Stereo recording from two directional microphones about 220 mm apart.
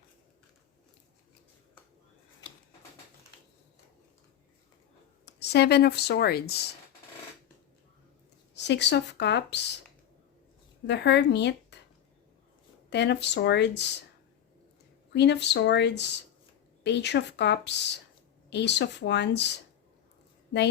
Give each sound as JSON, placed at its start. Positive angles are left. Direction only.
{"t": 2.4, "sound": "a sound", "side_deg": 20}
{"t": 5.2, "sound": "speech", "side_deg": 50}
{"t": 8.5, "sound": "speech", "side_deg": 50}
{"t": 10.8, "sound": "speech", "side_deg": 50}
{"t": 12.9, "sound": "speech", "side_deg": 50}
{"t": 15.1, "sound": "speech", "side_deg": 50}